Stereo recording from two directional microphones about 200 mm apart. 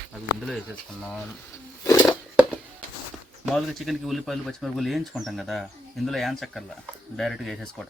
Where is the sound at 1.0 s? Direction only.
5° left (ahead or behind).